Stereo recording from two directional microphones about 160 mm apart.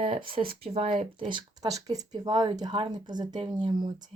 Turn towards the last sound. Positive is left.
turn(degrees=-30)  # may be behind; listen again after turning